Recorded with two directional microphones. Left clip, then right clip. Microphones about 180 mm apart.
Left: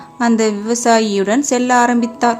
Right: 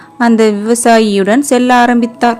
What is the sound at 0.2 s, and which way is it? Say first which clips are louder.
Speech: right 6 dB; 30° right (ahead or behind).